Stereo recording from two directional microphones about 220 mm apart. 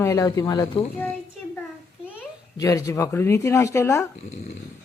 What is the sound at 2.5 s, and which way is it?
Speech, 15° left (ahead or behind).